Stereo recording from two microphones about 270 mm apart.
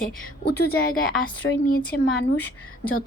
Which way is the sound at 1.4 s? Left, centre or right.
Left.